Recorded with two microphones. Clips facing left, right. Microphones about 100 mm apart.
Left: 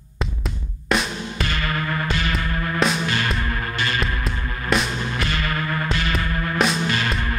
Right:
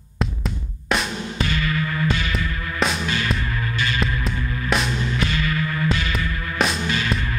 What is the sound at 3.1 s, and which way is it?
Music, 50° left (ahead or behind).